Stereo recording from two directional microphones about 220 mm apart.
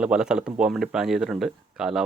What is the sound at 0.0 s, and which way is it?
Speech, 5° right (ahead or behind).